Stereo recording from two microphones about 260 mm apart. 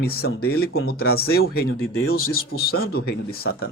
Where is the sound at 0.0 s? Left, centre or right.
Left.